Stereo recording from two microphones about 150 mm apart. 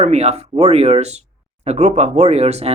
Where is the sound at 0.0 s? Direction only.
45° right (ahead or behind).